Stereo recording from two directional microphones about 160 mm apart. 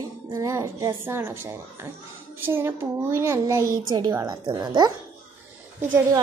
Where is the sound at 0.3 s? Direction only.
20° right (ahead or behind).